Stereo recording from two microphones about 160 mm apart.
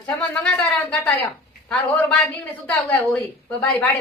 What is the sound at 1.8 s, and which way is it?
Speech, 5° left (ahead or behind).